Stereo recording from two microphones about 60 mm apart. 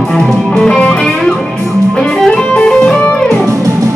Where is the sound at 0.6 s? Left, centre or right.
Centre.